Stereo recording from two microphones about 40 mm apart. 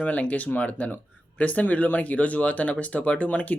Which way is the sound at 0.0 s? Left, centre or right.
Left.